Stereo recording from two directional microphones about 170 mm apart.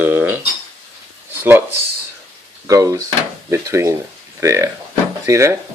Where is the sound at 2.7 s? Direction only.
20° right (ahead or behind).